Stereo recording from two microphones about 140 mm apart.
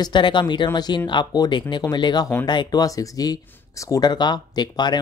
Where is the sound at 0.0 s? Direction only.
35° left (ahead or behind).